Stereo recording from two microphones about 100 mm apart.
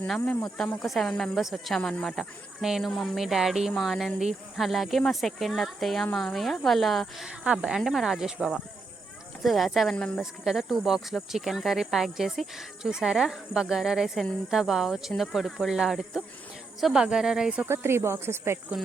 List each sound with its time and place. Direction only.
0.5 s speech: 5° left (ahead or behind)
7.3 s speech: 10° right (ahead or behind)
17.7 s speech: 25° right (ahead or behind)